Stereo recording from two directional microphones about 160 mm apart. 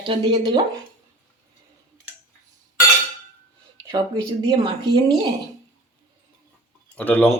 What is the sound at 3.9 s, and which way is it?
Speech, 30° right (ahead or behind).